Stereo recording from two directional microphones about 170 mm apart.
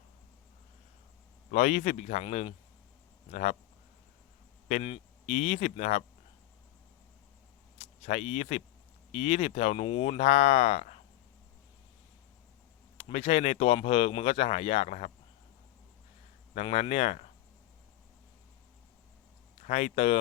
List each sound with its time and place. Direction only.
1.5 s a man's voice: 45° left (ahead or behind)
4.7 s speech: 40° left (ahead or behind)
8.0 s speech: 40° left (ahead or behind)
13.0 s speech: 35° left (ahead or behind)
16.6 s speech: 35° left (ahead or behind)
19.6 s speech: 40° left (ahead or behind)